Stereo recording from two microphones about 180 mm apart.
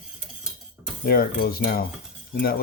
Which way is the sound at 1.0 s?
55° left (ahead or behind).